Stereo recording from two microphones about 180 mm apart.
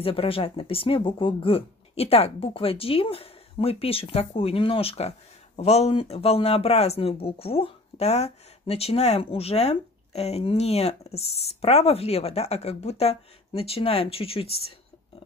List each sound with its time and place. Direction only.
0.0 s speech: 30° left (ahead or behind)